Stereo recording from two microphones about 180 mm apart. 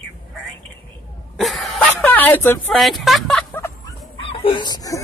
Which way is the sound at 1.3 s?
Centre (ahead or behind).